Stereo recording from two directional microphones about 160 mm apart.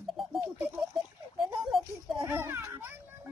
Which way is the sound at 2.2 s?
15° right (ahead or behind).